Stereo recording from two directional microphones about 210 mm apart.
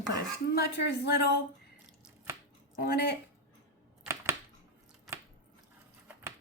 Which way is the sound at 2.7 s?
50° left (ahead or behind).